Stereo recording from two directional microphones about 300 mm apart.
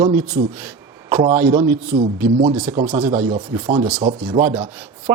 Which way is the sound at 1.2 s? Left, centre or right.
Centre.